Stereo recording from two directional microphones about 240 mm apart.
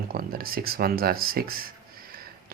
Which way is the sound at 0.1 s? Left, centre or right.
Right.